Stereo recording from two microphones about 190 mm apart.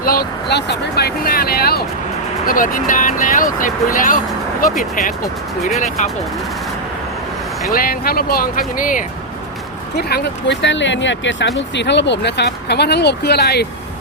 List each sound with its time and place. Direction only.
0.0 s speech: 50° left (ahead or behind)
6.0 s speech: 40° left (ahead or behind)
7.7 s speech: 50° left (ahead or behind)
10.0 s speech: 55° left (ahead or behind)